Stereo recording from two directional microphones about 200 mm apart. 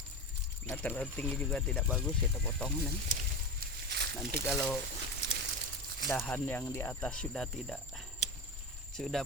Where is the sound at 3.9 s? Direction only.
60° right (ahead or behind).